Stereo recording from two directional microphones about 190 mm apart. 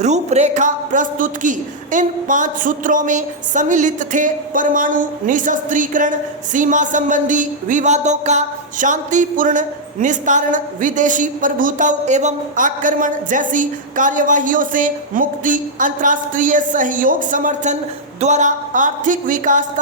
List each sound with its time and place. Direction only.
0.0 s a man's voice: 35° right (ahead or behind)